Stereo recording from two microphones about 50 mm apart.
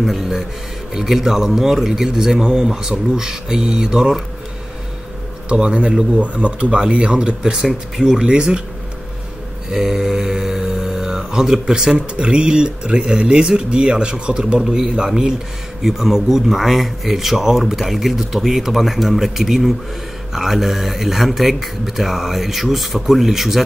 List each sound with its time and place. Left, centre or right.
0.0 s speech: centre
0.9 s mantra: centre
5.5 s speech: right
9.7 s mantra: centre
15.8 s speech: centre